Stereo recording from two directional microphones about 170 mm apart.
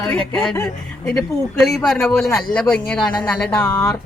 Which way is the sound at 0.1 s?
10° left (ahead or behind).